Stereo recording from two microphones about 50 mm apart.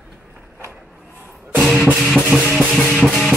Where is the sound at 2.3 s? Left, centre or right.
Right.